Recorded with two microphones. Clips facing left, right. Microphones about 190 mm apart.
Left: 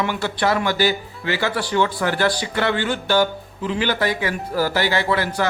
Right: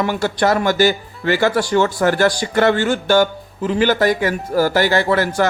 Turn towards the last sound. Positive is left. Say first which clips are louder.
# right 5 dB
turn(degrees=-45)  # may be behind; listen again after turning